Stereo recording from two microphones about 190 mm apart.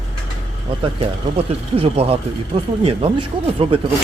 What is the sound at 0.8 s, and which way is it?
Speech, 30° right (ahead or behind).